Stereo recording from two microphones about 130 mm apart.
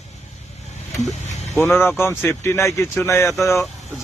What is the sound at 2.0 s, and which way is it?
Speech, 15° left (ahead or behind).